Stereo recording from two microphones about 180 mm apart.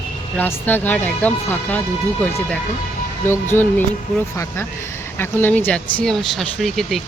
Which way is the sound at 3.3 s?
10° left (ahead or behind).